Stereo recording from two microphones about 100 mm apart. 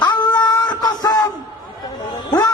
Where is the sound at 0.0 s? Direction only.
45° left (ahead or behind).